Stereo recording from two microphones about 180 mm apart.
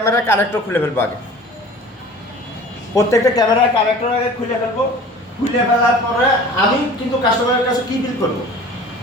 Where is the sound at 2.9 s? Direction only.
15° left (ahead or behind).